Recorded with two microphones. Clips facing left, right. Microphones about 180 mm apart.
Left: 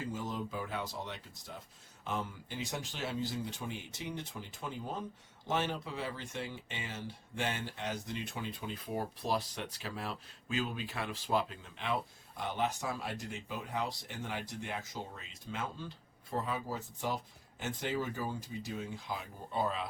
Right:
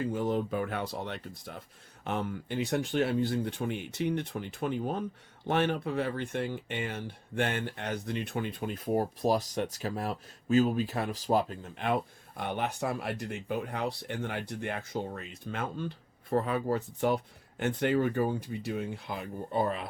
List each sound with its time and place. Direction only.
0.0 s speech: 60° right (ahead or behind)
12.4 s speech: 60° right (ahead or behind)